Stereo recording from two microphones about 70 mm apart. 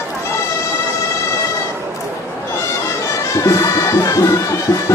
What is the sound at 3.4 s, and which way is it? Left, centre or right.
Music, left.